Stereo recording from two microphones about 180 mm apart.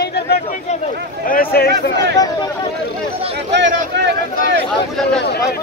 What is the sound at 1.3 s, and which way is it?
Speech, 55° left (ahead or behind).